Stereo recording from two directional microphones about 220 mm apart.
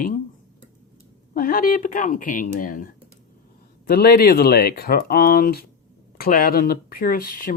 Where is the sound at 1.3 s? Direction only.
40° left (ahead or behind).